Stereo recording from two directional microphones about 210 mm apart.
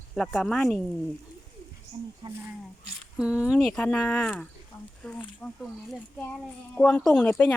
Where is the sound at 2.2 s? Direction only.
20° right (ahead or behind).